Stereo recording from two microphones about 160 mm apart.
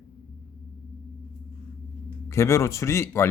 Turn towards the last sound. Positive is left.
turn(degrees=15)  # may be behind; listen again after turning